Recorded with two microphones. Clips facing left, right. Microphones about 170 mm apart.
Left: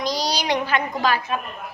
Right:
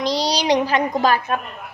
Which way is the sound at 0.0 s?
30° right (ahead or behind).